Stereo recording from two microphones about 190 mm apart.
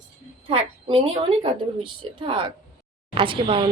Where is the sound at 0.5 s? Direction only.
30° right (ahead or behind).